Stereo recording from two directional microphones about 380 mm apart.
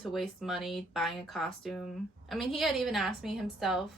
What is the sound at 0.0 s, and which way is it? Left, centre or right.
A woman's voice, centre.